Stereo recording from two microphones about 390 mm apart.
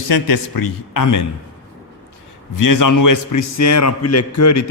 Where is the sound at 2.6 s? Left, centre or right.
Left.